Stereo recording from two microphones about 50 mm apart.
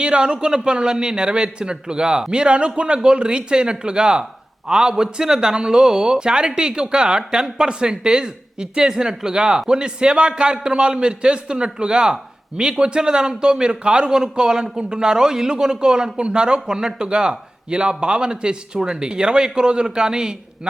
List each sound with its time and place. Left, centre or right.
0.0 s a man's voice: centre